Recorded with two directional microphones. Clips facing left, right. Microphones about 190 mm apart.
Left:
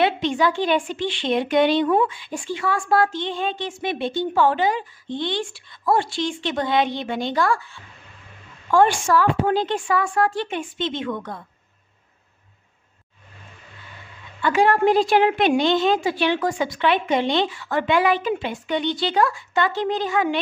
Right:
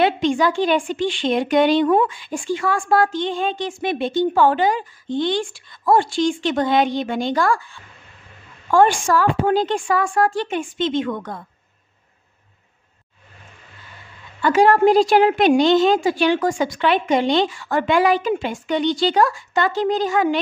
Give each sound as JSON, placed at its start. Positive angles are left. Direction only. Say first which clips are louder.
{"t": 0.0, "sound": "a woman's voice", "louder": "right 2 dB", "side_deg": -45}
{"t": 8.6, "sound": "a woman's voice", "louder": "right 2 dB", "side_deg": -50}
{"t": 14.4, "sound": "a woman's voice", "louder": "right 4 dB", "side_deg": -40}